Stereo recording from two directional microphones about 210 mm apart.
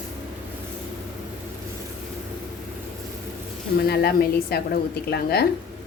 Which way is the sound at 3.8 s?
50° left (ahead or behind).